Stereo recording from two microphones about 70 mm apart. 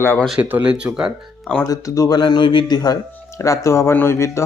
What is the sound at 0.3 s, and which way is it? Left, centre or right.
Speech, right.